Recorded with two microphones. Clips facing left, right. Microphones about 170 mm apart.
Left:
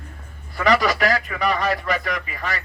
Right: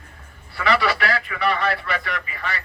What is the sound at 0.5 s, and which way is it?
A man's voice, 40° left (ahead or behind).